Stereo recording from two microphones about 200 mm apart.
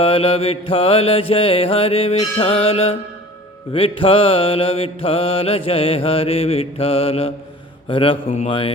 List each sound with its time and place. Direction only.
0.0 s mantra: 25° left (ahead or behind)